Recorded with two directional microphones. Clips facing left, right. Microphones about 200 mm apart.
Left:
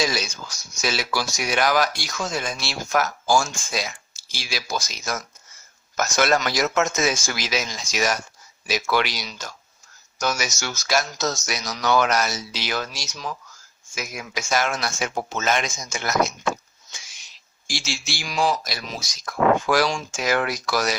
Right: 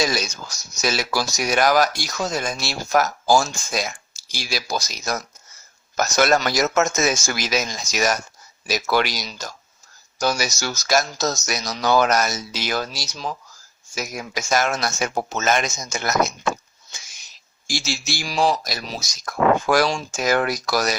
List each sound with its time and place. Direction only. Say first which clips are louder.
0.0 s speech: right 2 dB; 40° right (ahead or behind)
17.7 s speech: right 4 dB; 40° right (ahead or behind)